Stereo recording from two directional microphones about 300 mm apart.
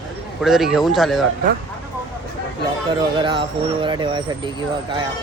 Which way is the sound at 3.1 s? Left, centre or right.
Centre.